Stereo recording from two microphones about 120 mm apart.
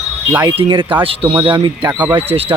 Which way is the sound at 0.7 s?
45° right (ahead or behind).